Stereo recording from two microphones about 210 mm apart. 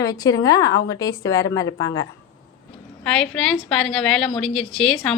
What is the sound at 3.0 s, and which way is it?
A woman's voice, 5° left (ahead or behind).